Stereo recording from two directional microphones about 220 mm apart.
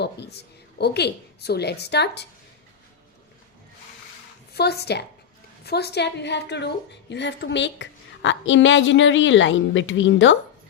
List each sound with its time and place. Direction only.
0.0 s a woman's voice: 50° left (ahead or behind)
4.5 s a woman's voice: 45° left (ahead or behind)